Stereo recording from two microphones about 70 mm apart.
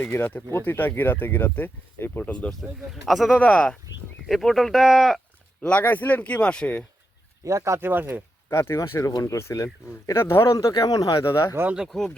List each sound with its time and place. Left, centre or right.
0.0 s speech: left
2.5 s speech: centre
3.3 s speech: left
4.3 s speech: centre
5.6 s speech: left
7.4 s speech: right
7.9 s speech: right
8.4 s speech: left
10.7 s speech: left
11.9 s speech: centre